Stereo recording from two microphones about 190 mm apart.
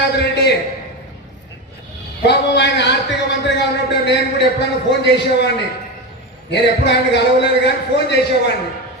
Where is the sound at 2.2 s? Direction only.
60° left (ahead or behind).